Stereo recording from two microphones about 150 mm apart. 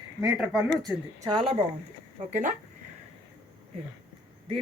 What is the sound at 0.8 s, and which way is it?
Speech, 30° right (ahead or behind).